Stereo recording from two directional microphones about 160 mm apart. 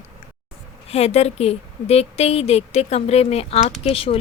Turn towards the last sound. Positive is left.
turn(degrees=35)  # may be behind; listen again after turning